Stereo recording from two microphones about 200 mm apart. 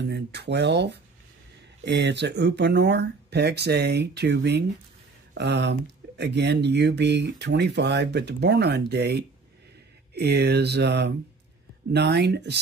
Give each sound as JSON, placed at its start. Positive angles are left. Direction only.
{"t": 0.0, "sound": "speech", "side_deg": -55}